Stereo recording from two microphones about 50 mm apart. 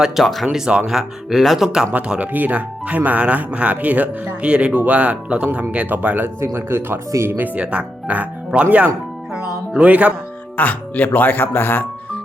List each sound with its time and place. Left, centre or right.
0.2 s speech: centre
2.0 s speech: right
6.2 s speech: right
7.3 s speech: right
7.6 s speech: right
9.7 s speech: right
10.6 s speech: left